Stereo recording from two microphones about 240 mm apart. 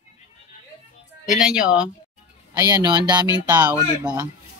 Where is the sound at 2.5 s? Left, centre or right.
Centre.